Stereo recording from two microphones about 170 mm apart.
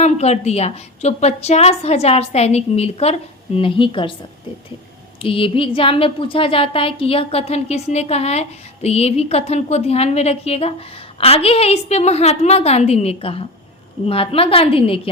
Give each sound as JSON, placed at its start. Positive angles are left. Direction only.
{"t": 0.0, "sound": "a woman's voice", "side_deg": 40}
{"t": 5.2, "sound": "a woman's voice", "side_deg": 30}